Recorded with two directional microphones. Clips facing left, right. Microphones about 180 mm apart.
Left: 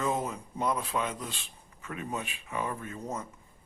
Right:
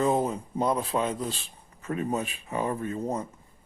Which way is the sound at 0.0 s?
35° right (ahead or behind).